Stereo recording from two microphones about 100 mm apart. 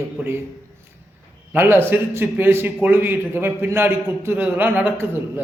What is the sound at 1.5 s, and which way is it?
Speech, 20° right (ahead or behind).